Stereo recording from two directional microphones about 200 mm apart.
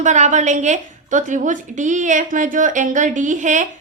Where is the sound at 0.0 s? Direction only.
40° right (ahead or behind).